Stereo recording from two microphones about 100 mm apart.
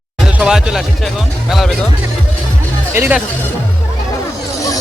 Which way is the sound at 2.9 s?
25° right (ahead or behind).